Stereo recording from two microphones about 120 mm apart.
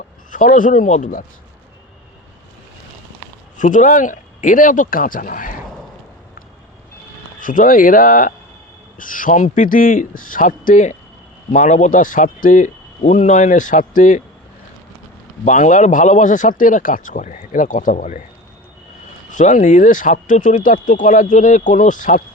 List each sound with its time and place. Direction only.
0.3 s speech: 90° left
3.6 s speech: 90° left
7.3 s speech: 90° left
9.0 s speech: 90° left
15.4 s speech: 90° left
19.3 s speech: 90° left